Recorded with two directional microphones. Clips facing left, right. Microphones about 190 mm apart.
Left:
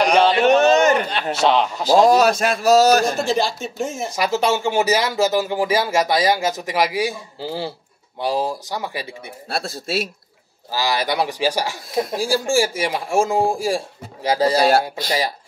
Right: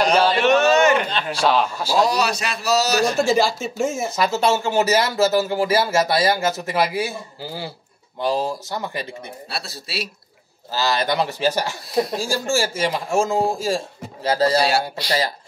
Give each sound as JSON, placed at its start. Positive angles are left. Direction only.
{"t": 0.0, "sound": "a sound", "side_deg": 15}
{"t": 0.4, "sound": "a sound", "side_deg": 40}
{"t": 1.3, "sound": "a man's voice", "side_deg": 20}
{"t": 2.0, "sound": "a man's voice", "side_deg": 50}
{"t": 3.2, "sound": "speech", "side_deg": 0}
{"t": 4.4, "sound": "speech", "side_deg": 15}
{"t": 7.3, "sound": "a man's voice", "side_deg": 25}
{"t": 8.2, "sound": "speech", "side_deg": 10}
{"t": 9.5, "sound": "a man's voice", "side_deg": 50}
{"t": 10.7, "sound": "speech", "side_deg": 10}
{"t": 14.6, "sound": "a man's voice", "side_deg": 50}